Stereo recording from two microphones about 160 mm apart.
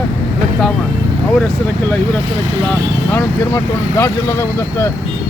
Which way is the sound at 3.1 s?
15° left (ahead or behind).